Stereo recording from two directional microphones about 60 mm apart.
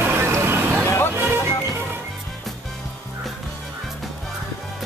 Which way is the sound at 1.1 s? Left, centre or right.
Right.